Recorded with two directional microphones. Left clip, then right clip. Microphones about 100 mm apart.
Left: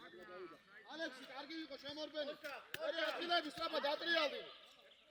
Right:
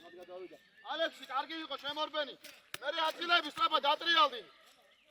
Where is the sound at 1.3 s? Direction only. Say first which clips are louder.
Right 12 dB; 90° right.